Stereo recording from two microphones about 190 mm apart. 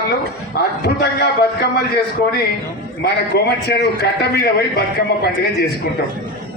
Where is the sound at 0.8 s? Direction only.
60° left (ahead or behind).